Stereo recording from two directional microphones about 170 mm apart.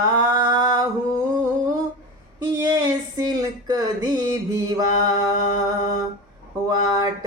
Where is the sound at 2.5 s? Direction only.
20° right (ahead or behind).